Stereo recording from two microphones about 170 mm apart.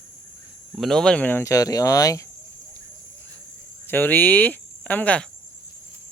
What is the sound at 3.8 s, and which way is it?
Cricket, 10° left (ahead or behind).